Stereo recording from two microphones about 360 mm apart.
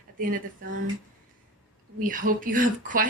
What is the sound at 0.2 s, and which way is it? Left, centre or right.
Speech, right.